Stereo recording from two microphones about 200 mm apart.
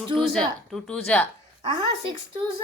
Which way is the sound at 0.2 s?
Centre (ahead or behind).